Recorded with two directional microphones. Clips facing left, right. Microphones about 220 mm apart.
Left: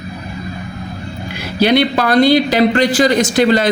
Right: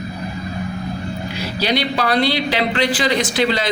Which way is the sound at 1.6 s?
55° left (ahead or behind).